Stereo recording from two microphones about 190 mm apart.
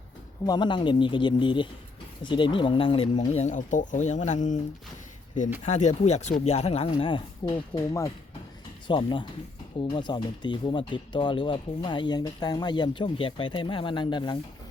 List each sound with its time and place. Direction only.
0.4 s speech: 20° left (ahead or behind); by 4.6 s 40° left (ahead or behind)
5.6 s speech: 40° left (ahead or behind)